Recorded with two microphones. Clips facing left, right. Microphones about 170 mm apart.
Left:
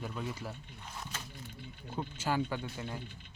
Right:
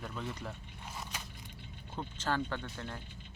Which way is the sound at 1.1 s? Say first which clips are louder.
Even; 10° right (ahead or behind).